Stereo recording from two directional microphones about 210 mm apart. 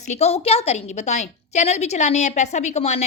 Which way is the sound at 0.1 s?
30° left (ahead or behind).